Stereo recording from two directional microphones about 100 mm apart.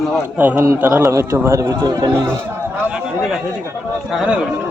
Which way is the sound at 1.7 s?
40° right (ahead or behind).